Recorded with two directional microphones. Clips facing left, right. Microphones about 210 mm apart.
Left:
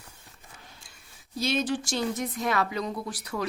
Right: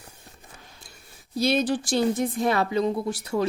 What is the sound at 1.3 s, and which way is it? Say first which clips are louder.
Speech: right 5 dB; 35° right (ahead or behind).